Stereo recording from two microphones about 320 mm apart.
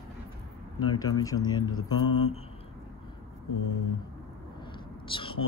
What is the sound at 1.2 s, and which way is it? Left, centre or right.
Speech, centre.